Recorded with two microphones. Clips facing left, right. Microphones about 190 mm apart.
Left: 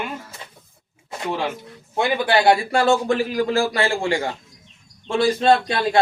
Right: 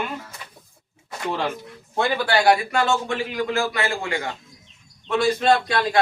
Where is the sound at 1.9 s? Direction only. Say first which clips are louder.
Left 2 dB; 15° left (ahead or behind).